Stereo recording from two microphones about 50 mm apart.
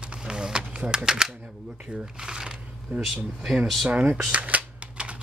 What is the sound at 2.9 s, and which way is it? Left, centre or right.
Speech, right.